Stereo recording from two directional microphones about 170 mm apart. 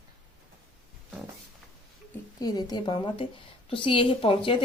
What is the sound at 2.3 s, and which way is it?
A woman's voice, 25° left (ahead or behind).